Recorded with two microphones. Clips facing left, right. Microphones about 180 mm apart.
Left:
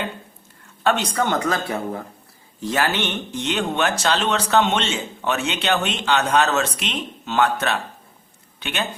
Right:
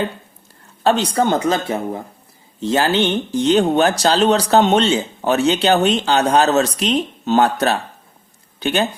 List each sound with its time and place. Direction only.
0.9 s speech: 30° right (ahead or behind)